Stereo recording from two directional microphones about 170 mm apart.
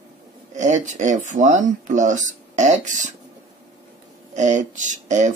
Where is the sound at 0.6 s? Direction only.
45° right (ahead or behind).